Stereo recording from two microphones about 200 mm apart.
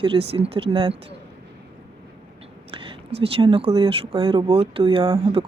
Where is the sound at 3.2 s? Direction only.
25° right (ahead or behind).